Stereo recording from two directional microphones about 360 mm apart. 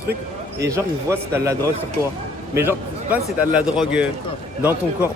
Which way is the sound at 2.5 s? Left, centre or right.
Centre.